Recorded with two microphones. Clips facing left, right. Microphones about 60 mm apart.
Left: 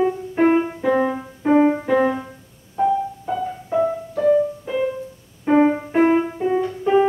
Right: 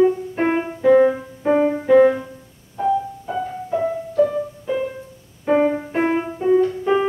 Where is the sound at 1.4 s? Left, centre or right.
Centre.